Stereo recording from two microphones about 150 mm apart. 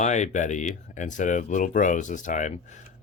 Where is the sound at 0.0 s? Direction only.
50° left (ahead or behind).